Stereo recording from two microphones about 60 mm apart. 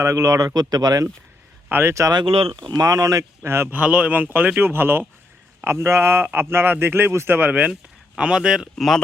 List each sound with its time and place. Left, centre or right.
0.0 s a man's voice: right
1.7 s speech: right
2.8 s speech: right
3.4 s speech: right
3.7 s speech: right
5.6 s speech: right
7.7 s speech: centre
8.7 s speech: centre